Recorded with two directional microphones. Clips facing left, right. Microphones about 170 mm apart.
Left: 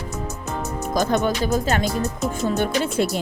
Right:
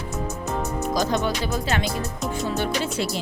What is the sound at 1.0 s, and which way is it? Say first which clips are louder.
Speech: left 5 dB; 55° left (ahead or behind).